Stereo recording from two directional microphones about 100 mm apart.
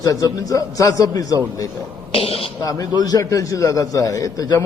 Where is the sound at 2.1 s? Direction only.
70° left (ahead or behind).